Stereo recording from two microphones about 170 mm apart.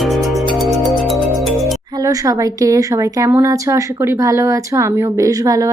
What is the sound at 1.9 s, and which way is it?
Speech, 20° right (ahead or behind).